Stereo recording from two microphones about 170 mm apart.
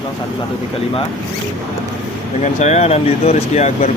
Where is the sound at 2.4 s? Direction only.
40° left (ahead or behind).